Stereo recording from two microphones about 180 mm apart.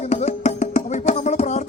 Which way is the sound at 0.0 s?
40° left (ahead or behind).